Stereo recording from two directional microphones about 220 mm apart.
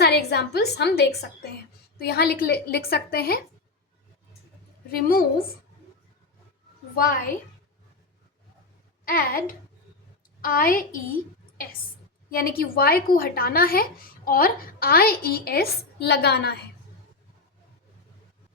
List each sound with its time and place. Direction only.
0.0 s a woman's voice: 45° left (ahead or behind)
4.9 s a woman's voice: 40° left (ahead or behind)
6.9 s a woman's voice: 40° left (ahead or behind)
9.0 s a woman's voice: 40° left (ahead or behind)
12.3 s a woman's voice: 40° left (ahead or behind)